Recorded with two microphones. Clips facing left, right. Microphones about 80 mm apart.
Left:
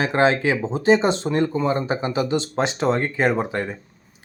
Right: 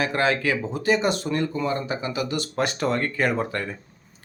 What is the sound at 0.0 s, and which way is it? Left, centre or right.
Speech, left.